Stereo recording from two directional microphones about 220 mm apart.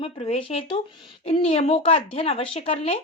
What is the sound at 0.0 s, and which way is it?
A woman's voice, 25° left (ahead or behind).